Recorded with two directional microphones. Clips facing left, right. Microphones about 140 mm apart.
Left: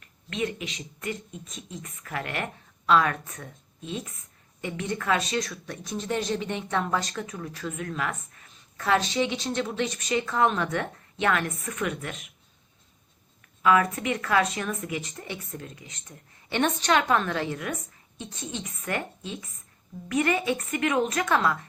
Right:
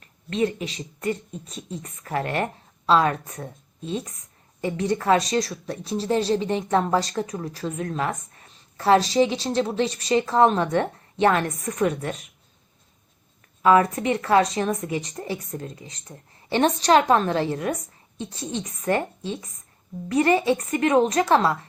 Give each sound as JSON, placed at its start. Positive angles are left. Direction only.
{"t": 0.3, "sound": "speech", "side_deg": -35}
{"t": 13.6, "sound": "speech", "side_deg": -35}